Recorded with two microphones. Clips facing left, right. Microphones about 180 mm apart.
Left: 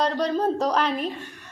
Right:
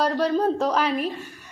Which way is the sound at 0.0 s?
5° right (ahead or behind).